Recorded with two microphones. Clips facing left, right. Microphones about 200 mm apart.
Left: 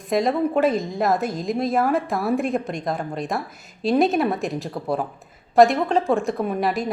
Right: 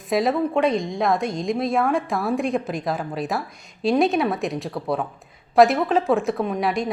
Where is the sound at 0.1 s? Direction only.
Centre (ahead or behind).